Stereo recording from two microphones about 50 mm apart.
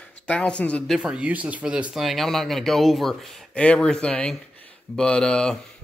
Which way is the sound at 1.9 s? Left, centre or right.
Centre.